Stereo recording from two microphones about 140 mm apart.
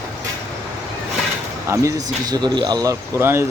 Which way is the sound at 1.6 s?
20° right (ahead or behind).